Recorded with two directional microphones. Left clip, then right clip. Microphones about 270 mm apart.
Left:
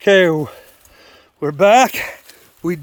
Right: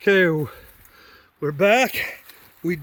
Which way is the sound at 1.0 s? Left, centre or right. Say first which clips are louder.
Left 5 dB; centre.